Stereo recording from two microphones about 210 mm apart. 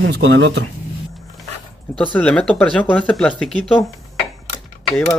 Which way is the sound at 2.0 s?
5° left (ahead or behind).